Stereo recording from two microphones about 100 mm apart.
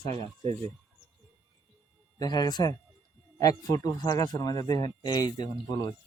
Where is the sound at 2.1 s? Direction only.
45° left (ahead or behind).